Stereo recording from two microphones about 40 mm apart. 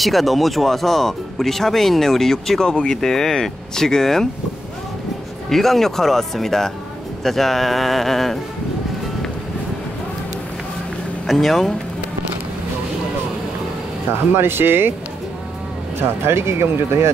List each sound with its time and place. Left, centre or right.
0.0 s speech: centre
2.7 s speech: left
3.0 s speech: centre
5.5 s speech: centre
11.2 s speech: centre
14.3 s speech: right
16.0 s speech: right